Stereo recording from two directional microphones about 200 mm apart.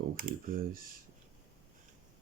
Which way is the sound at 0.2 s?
40° right (ahead or behind).